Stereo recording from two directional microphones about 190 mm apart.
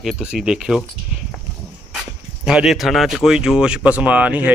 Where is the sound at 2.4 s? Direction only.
5° right (ahead or behind).